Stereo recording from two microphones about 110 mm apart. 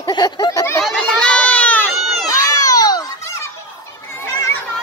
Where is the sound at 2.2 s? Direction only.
30° left (ahead or behind).